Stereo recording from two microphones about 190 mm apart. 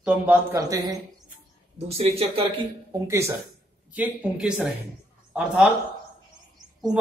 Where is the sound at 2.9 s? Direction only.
15° right (ahead or behind).